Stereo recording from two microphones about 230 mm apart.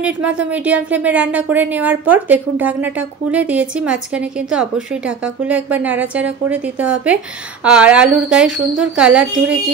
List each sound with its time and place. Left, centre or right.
0.0 s a woman's voice: centre